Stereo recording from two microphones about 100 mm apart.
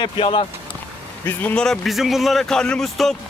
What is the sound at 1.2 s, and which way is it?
Speech, 20° left (ahead or behind).